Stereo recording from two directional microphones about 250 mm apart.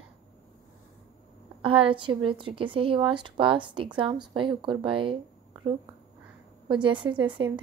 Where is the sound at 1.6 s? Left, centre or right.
Right.